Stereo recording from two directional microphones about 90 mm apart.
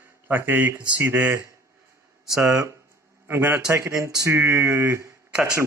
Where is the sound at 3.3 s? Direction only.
20° right (ahead or behind).